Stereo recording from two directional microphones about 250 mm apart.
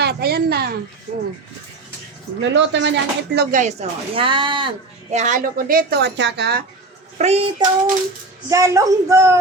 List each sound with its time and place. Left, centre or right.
0.0 s speech: right
2.4 s speech: right; by 4.7 s centre
5.1 s speech: right
7.2 s speech: right
8.4 s speech: centre